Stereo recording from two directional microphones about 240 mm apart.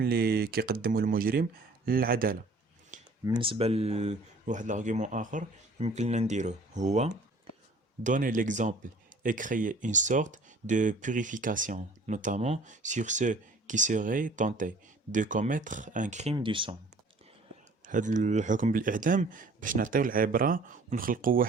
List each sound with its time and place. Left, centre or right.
0.0 s speech: right
2.9 s a sound: right
3.2 s speech: centre
17.8 s speech: right